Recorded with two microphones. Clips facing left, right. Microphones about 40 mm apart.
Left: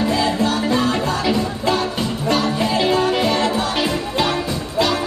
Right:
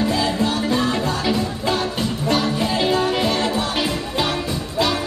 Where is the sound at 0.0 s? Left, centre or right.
Centre.